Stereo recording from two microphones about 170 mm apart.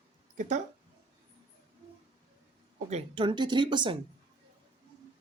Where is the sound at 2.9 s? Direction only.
30° right (ahead or behind).